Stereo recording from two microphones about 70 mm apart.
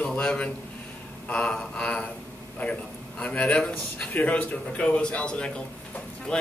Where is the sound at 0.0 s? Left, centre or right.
Centre.